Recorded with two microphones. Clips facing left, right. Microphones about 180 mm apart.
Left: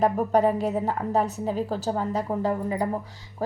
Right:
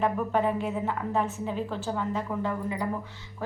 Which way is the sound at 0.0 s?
40° left (ahead or behind).